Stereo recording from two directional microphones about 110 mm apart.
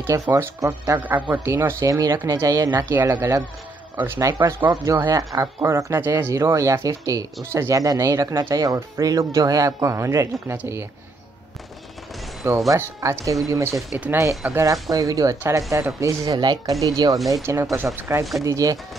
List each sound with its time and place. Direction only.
0.0 s speech: 20° right (ahead or behind)
2.8 s speech: 20° right (ahead or behind)
12.4 s speech: 30° right (ahead or behind)
16.3 s speech: 40° right (ahead or behind)
17.3 s speech: 25° right (ahead or behind)